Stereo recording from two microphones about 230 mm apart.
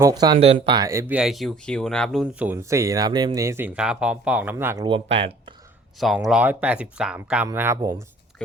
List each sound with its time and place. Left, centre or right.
0.0 s speech: centre
4.9 s speech: right
6.0 s speech: centre